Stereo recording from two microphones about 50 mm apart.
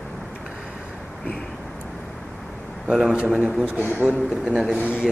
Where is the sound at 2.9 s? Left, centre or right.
Centre.